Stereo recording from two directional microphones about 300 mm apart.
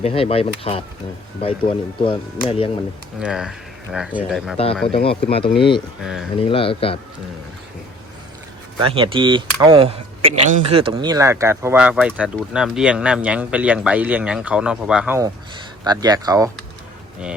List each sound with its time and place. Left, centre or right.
0.0 s speech: centre
3.2 s speech: centre
4.5 s speech: centre
6.0 s speech: centre
6.3 s speech: centre
8.8 s speech: centre